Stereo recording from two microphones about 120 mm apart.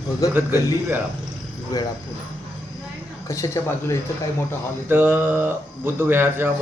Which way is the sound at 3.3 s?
25° left (ahead or behind).